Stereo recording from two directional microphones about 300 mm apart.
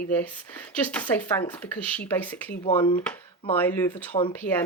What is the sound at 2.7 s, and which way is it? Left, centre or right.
Speech, centre.